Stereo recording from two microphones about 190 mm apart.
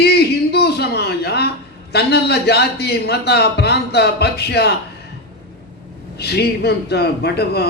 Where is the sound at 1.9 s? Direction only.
60° left (ahead or behind).